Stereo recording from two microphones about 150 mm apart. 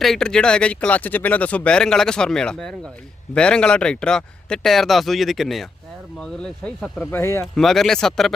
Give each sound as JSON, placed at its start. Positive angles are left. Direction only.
{"t": 0.0, "sound": "speech", "side_deg": 5}
{"t": 7.0, "sound": "speech", "side_deg": 15}
{"t": 7.5, "sound": "speech", "side_deg": 0}